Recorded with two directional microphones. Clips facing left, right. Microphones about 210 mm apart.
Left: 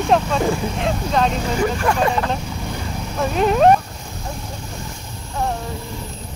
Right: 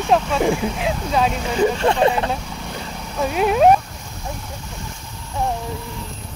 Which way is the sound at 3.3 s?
5° right (ahead or behind).